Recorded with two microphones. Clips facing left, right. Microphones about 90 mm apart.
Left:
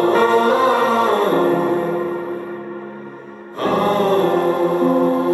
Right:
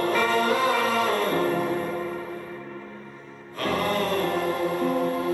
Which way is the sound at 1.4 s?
55° left (ahead or behind).